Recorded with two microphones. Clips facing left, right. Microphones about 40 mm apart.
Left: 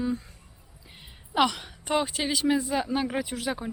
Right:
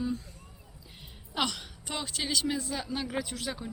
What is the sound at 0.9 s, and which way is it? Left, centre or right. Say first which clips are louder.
A woman's voice: left 9 dB; left.